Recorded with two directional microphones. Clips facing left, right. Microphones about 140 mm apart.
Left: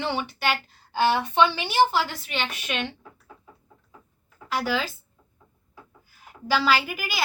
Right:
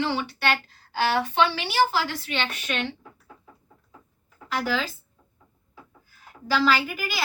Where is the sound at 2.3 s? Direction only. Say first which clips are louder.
Right 1 dB; 5° left (ahead or behind).